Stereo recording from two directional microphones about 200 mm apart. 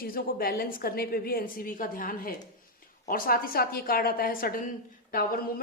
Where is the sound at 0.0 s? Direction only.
45° left (ahead or behind).